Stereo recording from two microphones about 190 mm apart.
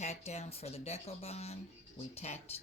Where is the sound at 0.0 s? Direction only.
35° left (ahead or behind).